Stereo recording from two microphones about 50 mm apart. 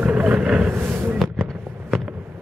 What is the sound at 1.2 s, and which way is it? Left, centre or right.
Fireworks, centre.